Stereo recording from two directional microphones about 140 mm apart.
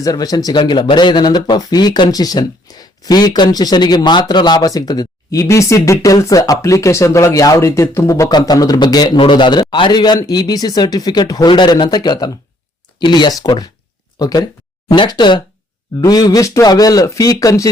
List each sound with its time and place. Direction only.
0.0 s speech: 25° left (ahead or behind)